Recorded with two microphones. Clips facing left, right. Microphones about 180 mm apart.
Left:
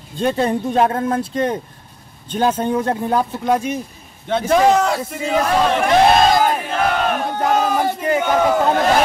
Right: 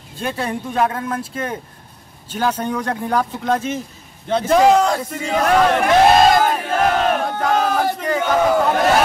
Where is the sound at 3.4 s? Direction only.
15° left (ahead or behind).